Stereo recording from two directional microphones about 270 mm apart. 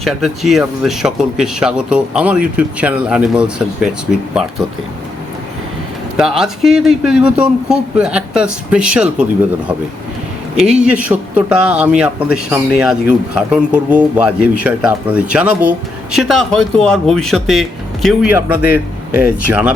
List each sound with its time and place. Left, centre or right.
0.0 s speech: centre
6.1 s speech: centre
10.7 s speech: centre